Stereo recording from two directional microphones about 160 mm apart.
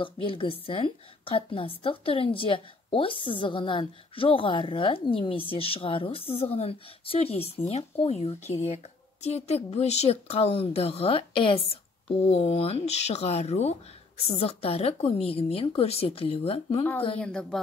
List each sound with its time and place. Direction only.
0.0 s a woman's voice: 35° left (ahead or behind)
17.2 s a woman's voice: 5° left (ahead or behind)